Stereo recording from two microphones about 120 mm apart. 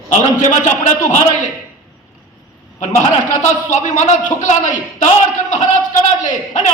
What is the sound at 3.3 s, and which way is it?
A man's voice, 90° left.